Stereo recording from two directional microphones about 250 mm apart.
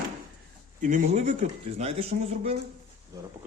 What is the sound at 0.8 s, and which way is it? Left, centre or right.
Speech, right.